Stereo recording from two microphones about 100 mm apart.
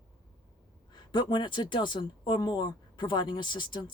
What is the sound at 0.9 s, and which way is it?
Speech, 50° left (ahead or behind).